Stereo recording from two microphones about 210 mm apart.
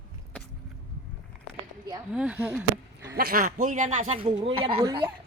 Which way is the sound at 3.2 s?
45° right (ahead or behind).